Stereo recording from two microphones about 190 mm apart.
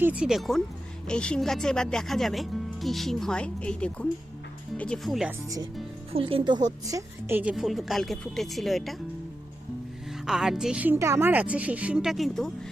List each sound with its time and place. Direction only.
0.0 s speech: 5° right (ahead or behind)
6.1 s speech: 30° right (ahead or behind); by 9.0 s centre (ahead or behind)
10.2 s a woman's voice: centre (ahead or behind)